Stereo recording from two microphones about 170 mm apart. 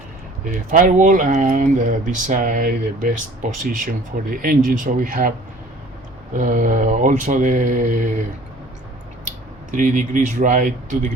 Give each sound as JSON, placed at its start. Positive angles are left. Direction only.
{"t": 0.4, "sound": "speech", "side_deg": -50}
{"t": 6.3, "sound": "speech", "side_deg": -50}
{"t": 9.7, "sound": "speech", "side_deg": -50}